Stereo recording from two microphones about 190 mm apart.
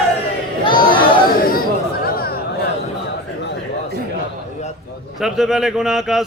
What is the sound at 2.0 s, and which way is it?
Chatter, 55° left (ahead or behind).